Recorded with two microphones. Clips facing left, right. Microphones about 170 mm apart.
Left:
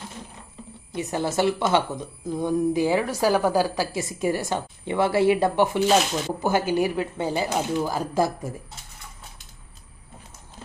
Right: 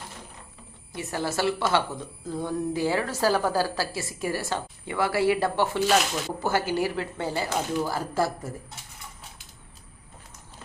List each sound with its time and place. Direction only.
0.9 s a woman's voice: 20° left (ahead or behind)